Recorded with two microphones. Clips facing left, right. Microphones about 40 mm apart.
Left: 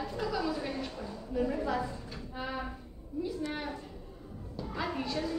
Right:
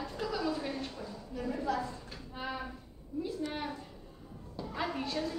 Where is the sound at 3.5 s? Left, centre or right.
Centre.